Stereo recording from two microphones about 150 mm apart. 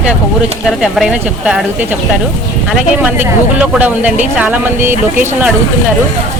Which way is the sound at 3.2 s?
10° right (ahead or behind).